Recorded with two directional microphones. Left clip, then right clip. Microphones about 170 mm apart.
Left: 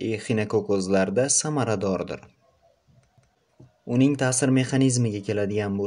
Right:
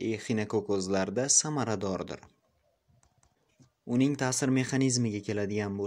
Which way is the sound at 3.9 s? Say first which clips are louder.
Left 6 dB; 30° right (ahead or behind).